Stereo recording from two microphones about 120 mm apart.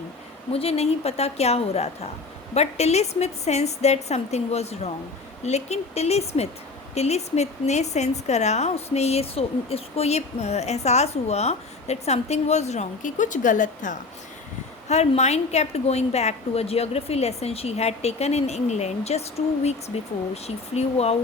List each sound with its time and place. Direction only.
0.5 s a woman's voice: 55° left (ahead or behind); by 13.9 s 90° left
14.8 s a woman's voice: 65° left (ahead or behind)